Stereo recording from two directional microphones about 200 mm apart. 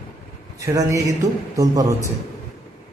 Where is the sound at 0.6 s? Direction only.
15° right (ahead or behind).